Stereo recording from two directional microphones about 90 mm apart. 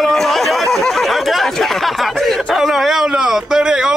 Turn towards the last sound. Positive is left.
turn(degrees=-5)  # may be behind; listen again after turning